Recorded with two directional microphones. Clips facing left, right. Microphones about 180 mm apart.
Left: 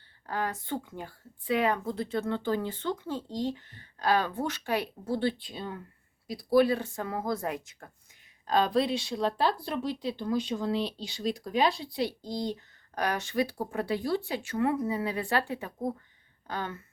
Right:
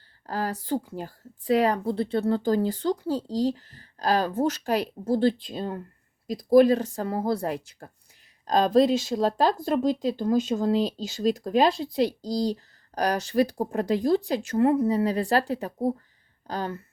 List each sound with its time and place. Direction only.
0.3 s a woman's voice: 35° right (ahead or behind)